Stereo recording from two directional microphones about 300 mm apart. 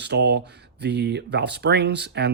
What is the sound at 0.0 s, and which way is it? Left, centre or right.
Speech, right.